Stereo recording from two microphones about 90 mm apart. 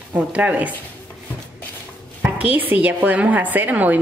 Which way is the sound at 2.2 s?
15° right (ahead or behind).